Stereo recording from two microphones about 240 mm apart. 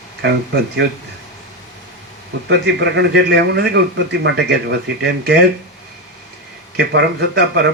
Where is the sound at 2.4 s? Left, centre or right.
Right.